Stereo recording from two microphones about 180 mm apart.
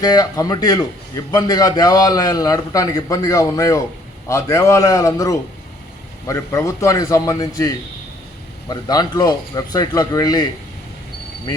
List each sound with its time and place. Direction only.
0.0 s a man's voice: 20° left (ahead or behind)
8.7 s a man's voice: 20° left (ahead or behind)